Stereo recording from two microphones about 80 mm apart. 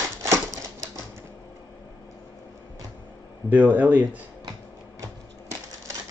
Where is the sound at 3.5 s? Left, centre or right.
Right.